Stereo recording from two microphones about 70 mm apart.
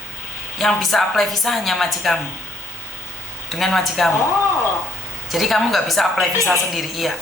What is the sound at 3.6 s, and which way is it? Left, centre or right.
Speech, centre.